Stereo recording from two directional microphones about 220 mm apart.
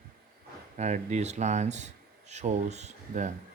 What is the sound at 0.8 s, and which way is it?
Speech, 30° right (ahead or behind).